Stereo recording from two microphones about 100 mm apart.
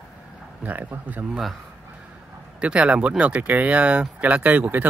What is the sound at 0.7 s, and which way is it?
Speech, 15° right (ahead or behind).